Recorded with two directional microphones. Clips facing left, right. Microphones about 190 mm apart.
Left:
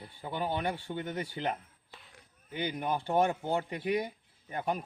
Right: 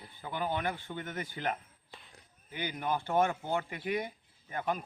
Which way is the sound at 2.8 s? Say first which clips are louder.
Left 1 dB; 20° left (ahead or behind).